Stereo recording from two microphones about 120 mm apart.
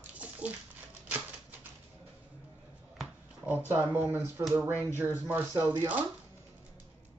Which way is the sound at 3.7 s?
15° right (ahead or behind).